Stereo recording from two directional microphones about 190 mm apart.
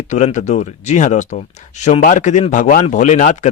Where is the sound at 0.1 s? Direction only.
40° left (ahead or behind).